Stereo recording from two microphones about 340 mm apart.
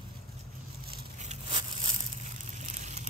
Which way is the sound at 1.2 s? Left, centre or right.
Centre.